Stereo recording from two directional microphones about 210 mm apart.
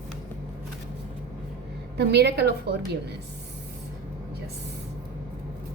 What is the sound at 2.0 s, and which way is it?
Speech, 50° right (ahead or behind).